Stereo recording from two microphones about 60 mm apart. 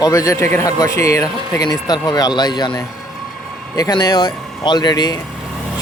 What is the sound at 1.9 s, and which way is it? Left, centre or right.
Speech, left.